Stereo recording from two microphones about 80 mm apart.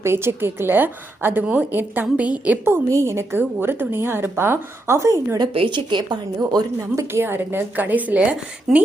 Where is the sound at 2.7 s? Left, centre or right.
Right.